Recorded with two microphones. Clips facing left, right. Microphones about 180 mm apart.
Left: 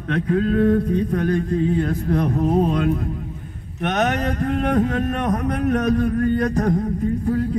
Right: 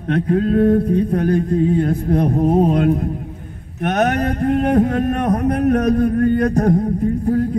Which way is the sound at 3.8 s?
55° right (ahead or behind).